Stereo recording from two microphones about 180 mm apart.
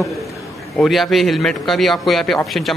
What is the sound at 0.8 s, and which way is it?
A man's voice, centre (ahead or behind).